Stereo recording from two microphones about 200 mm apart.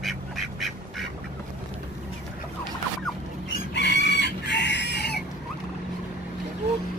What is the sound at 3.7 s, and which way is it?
Chicken, 65° left (ahead or behind).